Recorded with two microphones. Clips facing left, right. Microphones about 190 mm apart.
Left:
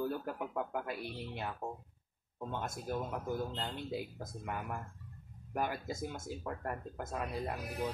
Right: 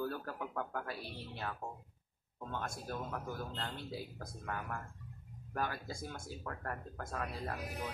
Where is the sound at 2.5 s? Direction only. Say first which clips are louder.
Left 3 dB; 20° left (ahead or behind).